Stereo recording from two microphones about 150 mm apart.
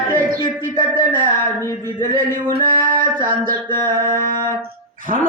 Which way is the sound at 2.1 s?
65° right (ahead or behind).